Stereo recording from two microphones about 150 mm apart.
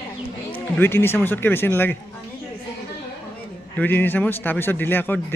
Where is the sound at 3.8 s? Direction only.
15° left (ahead or behind).